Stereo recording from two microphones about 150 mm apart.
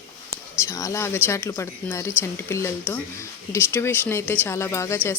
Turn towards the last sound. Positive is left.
turn(degrees=15)  # may be behind; listen again after turning